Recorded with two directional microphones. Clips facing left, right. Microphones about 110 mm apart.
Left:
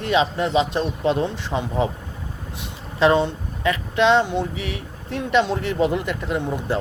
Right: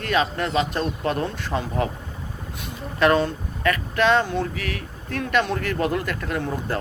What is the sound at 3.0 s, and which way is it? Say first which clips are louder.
Speech: left 2 dB; 20° left (ahead or behind).